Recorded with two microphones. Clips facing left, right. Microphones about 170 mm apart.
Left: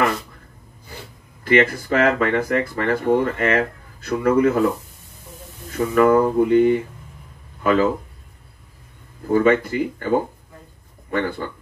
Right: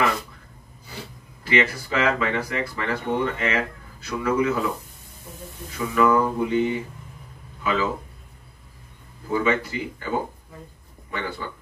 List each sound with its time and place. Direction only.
1.4 s speech: 50° left (ahead or behind)
5.7 s speech: 50° left (ahead or behind)
9.3 s speech: 50° left (ahead or behind)